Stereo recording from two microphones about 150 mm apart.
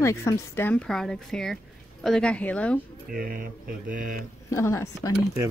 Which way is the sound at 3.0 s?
75° right (ahead or behind).